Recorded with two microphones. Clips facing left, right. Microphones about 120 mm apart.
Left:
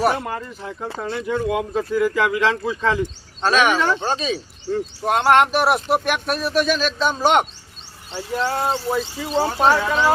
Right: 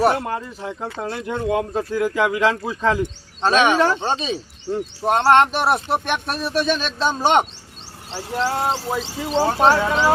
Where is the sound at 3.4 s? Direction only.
25° right (ahead or behind).